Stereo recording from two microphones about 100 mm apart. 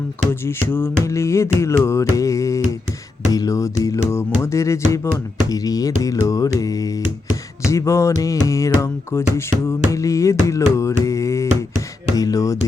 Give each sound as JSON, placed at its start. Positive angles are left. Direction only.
{"t": 0.4, "sound": "music", "side_deg": 25}